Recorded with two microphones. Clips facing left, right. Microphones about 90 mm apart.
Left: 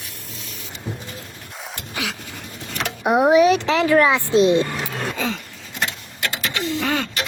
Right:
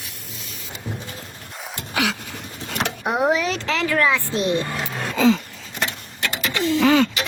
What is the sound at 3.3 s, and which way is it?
Vehicle, 15° left (ahead or behind).